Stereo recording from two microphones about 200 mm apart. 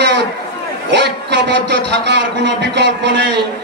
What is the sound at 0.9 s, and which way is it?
A man's voice, 60° right (ahead or behind).